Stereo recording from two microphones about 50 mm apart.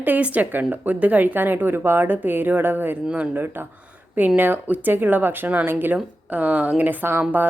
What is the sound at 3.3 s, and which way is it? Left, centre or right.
A woman's voice, right.